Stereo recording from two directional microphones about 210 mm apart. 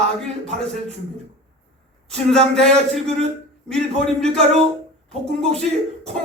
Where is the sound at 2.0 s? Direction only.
5° left (ahead or behind).